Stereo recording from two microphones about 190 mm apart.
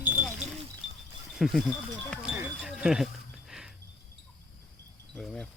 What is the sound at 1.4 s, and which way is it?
Speech, centre (ahead or behind).